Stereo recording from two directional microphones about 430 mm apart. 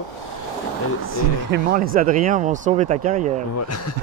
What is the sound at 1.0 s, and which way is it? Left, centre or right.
Speech, right.